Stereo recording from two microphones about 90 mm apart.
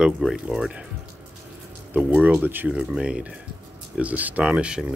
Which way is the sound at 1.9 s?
20° right (ahead or behind).